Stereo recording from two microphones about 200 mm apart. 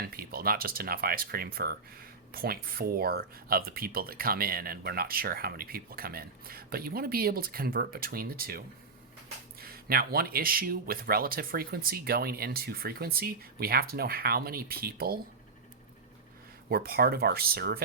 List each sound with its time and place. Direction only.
0.0 s speech: 50° right (ahead or behind)
16.6 s speech: 50° right (ahead or behind)